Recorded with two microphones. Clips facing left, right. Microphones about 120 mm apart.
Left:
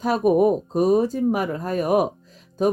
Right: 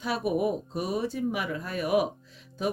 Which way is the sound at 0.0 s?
45° left (ahead or behind).